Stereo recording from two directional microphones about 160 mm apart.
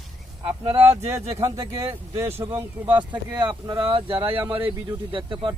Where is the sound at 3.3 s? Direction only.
30° right (ahead or behind).